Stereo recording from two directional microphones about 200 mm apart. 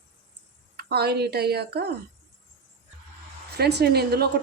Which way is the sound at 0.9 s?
55° right (ahead or behind).